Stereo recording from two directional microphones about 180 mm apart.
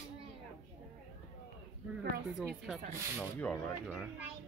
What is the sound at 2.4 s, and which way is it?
Speech, 5° right (ahead or behind).